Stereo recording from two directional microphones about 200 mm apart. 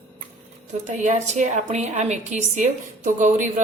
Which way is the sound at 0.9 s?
35° right (ahead or behind).